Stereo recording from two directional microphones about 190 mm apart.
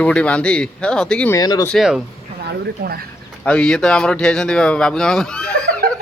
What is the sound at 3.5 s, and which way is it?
Speech, 5° left (ahead or behind).